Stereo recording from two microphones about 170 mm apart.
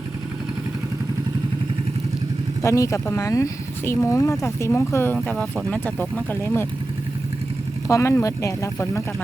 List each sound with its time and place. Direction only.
2.6 s speech: 20° left (ahead or behind)
7.9 s speech: 15° left (ahead or behind)